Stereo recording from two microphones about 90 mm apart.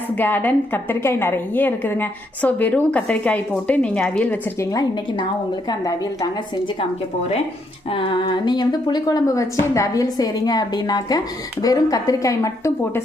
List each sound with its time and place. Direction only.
0.2 s a woman's voice: 20° left (ahead or behind)
5.6 s a woman's voice: 45° left (ahead or behind)
7.9 s a woman's voice: 70° left (ahead or behind); by 12.7 s 35° left (ahead or behind)